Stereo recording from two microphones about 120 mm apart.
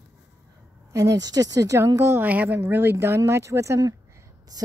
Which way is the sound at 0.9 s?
30° right (ahead or behind).